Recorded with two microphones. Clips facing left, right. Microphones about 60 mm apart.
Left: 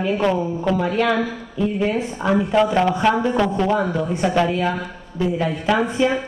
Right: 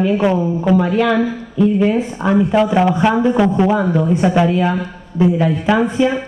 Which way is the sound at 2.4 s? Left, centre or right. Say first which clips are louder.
Right 2 dB; centre.